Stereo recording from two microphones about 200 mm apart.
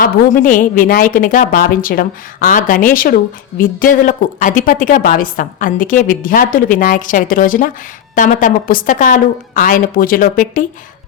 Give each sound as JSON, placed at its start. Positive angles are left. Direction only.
{"t": 0.0, "sound": "a woman's voice", "side_deg": 40}